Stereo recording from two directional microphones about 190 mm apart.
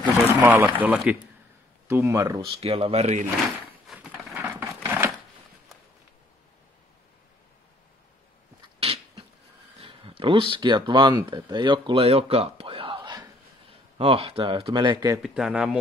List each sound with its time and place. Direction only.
0.4 s speech: 10° right (ahead or behind)
2.6 s speech: 30° right (ahead or behind)
3.8 s a sound: centre (ahead or behind)
4.5 s a sound: 10° right (ahead or behind)
8.7 s cat: 30° right (ahead or behind)
9.8 s speech: 30° right (ahead or behind)
15.2 s speech: centre (ahead or behind)